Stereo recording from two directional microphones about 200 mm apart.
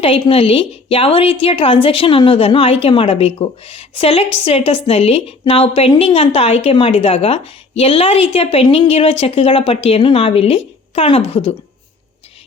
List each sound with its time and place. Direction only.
0.0 s a woman's voice: 25° left (ahead or behind)